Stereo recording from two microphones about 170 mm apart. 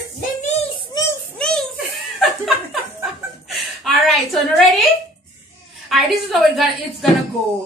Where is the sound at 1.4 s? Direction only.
5° left (ahead or behind).